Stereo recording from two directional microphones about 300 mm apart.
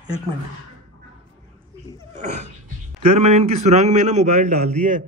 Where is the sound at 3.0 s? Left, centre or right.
Right.